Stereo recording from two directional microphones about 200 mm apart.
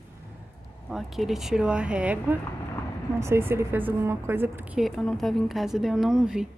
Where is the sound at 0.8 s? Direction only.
Centre (ahead or behind).